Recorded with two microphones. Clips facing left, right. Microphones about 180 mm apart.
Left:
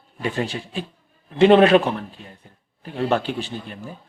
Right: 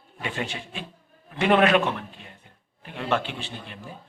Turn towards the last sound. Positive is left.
turn(degrees=40)  # may be behind; listen again after turning